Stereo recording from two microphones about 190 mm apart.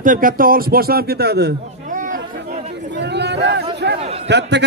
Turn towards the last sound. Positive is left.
turn(degrees=-65)  # may be behind; listen again after turning